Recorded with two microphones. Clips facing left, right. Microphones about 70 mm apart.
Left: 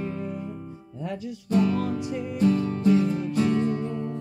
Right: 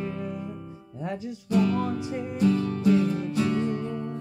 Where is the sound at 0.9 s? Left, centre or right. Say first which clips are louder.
Even; right.